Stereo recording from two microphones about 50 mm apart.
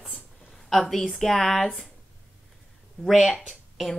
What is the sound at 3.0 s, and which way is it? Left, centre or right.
Speech, centre.